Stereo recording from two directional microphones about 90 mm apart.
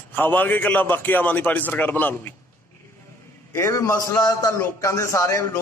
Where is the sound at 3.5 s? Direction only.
30° left (ahead or behind).